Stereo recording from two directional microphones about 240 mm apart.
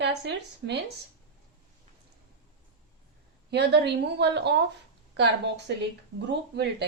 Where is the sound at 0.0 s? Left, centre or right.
Right.